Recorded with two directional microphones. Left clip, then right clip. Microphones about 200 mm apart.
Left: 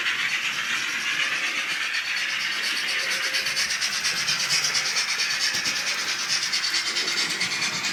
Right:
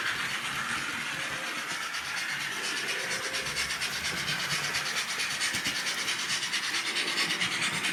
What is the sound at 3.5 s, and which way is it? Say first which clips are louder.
Rub: left 6 dB; 10° left (ahead or behind).